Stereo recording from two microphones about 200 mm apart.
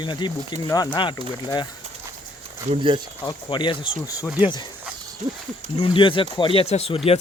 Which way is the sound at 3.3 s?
25° left (ahead or behind).